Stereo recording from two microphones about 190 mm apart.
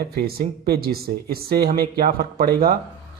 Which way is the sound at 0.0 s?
55° right (ahead or behind).